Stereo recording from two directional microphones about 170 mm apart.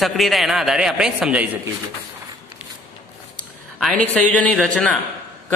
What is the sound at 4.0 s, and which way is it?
Speech, 5° left (ahead or behind).